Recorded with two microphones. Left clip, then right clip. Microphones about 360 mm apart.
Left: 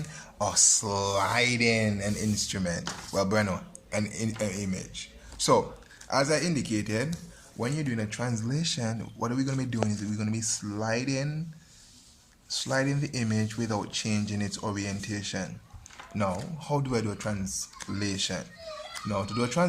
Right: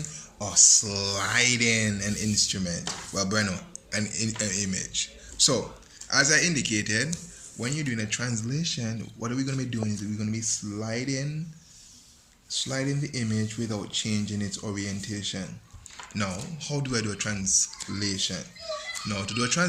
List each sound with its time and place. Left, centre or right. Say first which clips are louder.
0.1 s speech: left 3 dB; left
12.5 s speech: left 1 dB; left